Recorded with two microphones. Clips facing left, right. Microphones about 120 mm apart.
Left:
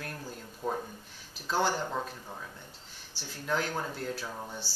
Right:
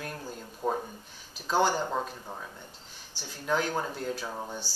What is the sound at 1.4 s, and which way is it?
Speech, centre (ahead or behind).